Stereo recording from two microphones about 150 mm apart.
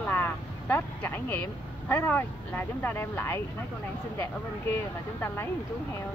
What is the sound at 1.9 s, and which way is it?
Speech, 15° left (ahead or behind).